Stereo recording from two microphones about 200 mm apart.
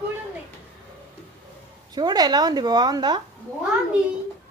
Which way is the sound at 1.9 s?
20° right (ahead or behind).